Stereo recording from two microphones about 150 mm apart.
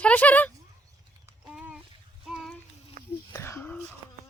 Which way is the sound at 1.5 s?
10° right (ahead or behind).